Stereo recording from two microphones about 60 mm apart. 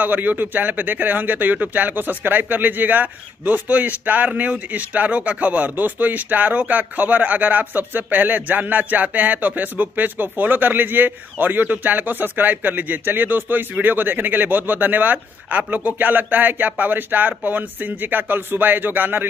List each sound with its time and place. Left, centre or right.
0.0 s a man's voice: right